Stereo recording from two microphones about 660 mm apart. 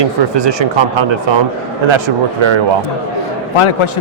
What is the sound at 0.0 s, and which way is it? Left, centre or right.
Speech, right.